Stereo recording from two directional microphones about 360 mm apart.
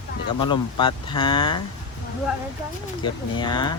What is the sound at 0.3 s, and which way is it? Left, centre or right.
Dog, centre.